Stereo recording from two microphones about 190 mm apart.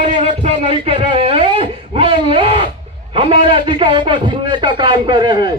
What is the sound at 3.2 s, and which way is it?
Speech, 25° right (ahead or behind).